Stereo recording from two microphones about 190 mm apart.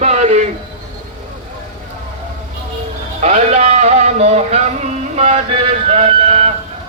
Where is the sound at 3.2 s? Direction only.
35° right (ahead or behind).